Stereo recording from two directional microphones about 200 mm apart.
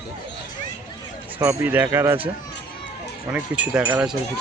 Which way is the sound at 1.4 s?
15° right (ahead or behind).